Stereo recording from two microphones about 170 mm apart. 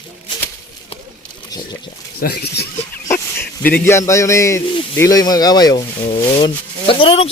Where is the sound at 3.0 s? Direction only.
15° left (ahead or behind).